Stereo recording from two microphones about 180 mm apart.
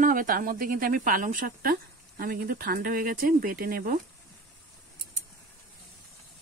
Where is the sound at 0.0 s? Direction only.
50° right (ahead or behind).